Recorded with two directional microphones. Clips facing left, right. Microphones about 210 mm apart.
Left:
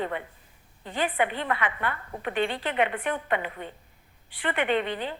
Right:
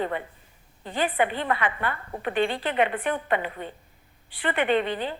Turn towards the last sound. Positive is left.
turn(degrees=-35)  # may be behind; listen again after turning